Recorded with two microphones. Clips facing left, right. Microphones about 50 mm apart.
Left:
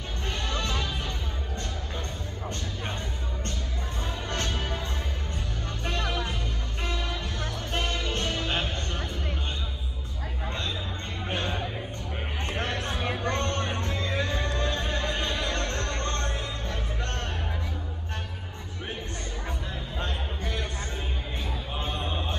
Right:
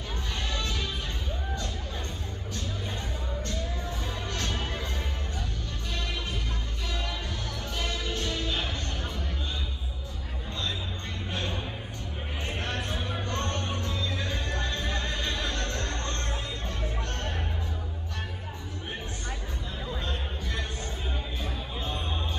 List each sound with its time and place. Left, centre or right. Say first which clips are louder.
0.5 s music: left 3 dB; left
5.9 s music: left 6 dB; left
7.7 s music: left 3 dB; left
11.2 s a sound: left 4 dB; left
12.8 s a sound: left 4 dB; left
13.6 s music: left 2 dB; left